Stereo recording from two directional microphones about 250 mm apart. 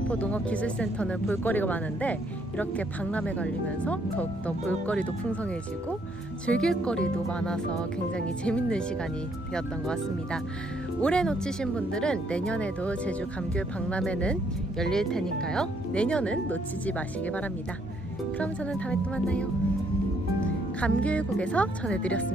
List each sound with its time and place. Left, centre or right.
0.1 s speech: centre
20.8 s speech: centre